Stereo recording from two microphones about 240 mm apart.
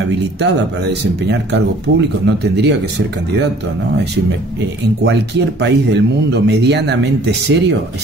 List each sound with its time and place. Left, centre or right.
0.4 s speech: right
5.0 s speech: right